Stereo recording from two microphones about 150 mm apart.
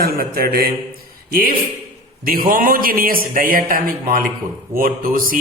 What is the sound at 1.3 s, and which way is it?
A man's voice, 70° right (ahead or behind).